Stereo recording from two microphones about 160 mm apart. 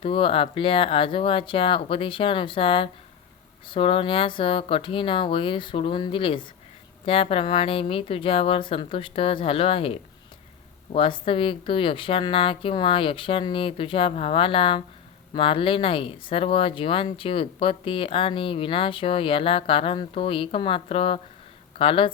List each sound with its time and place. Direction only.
0.0 s speech: 35° left (ahead or behind)